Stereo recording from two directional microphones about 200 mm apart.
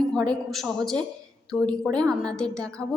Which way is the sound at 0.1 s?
5° left (ahead or behind).